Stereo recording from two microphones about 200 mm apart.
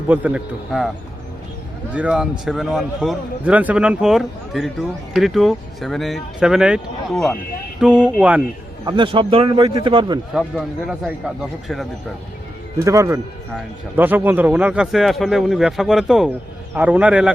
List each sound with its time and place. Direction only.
0.1 s speech: 5° right (ahead or behind)
1.9 s a man's voice: 5° right (ahead or behind)
8.8 s a man's voice: 20° right (ahead or behind)
10.3 s speech: centre (ahead or behind)
12.8 s a man's voice: 15° right (ahead or behind)